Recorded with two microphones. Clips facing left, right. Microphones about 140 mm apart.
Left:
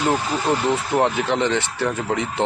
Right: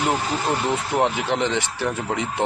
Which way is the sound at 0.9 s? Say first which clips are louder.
Left 1 dB; 15° right (ahead or behind).